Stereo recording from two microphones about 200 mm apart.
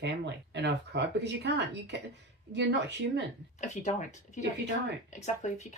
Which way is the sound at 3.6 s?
35° left (ahead or behind).